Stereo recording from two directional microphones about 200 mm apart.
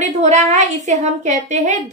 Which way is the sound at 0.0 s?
35° right (ahead or behind).